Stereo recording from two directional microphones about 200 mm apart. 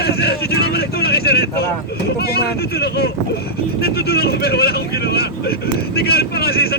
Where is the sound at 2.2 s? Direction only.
50° left (ahead or behind).